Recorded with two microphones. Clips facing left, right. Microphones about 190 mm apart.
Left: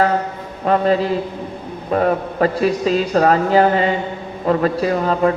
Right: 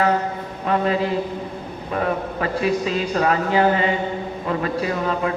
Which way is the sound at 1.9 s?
40° left (ahead or behind).